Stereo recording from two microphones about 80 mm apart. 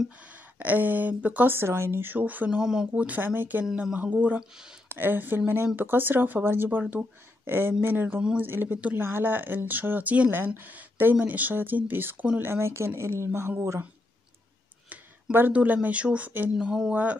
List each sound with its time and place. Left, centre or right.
0.6 s speech: right
2.6 s speech: centre
2.9 s a woman's voice: right
15.3 s speech: right
16.9 s speech: centre